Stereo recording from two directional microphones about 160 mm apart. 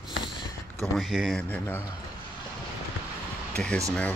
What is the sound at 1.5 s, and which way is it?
Speech, 10° left (ahead or behind).